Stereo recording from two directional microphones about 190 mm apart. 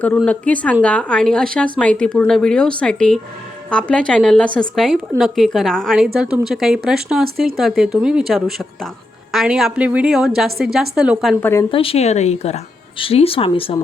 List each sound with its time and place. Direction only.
0.2 s speech: 5° left (ahead or behind)
11.3 s speech: 10° left (ahead or behind)
11.7 s speech: 30° left (ahead or behind)